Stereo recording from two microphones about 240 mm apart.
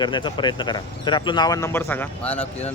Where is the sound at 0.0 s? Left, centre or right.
Centre.